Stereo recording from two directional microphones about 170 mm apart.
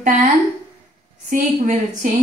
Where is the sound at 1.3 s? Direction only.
50° right (ahead or behind).